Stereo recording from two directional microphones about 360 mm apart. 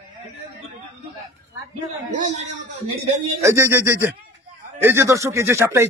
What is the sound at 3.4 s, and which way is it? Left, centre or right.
Speech, centre.